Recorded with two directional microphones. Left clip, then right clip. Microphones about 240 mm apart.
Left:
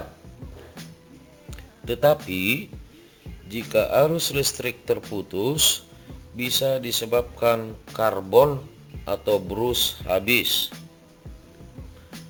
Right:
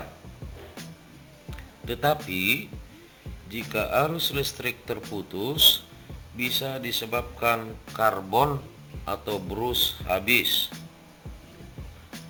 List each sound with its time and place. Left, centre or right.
0.8 s music: centre
1.5 s music: left
2.3 s speech: left
3.7 s speech: left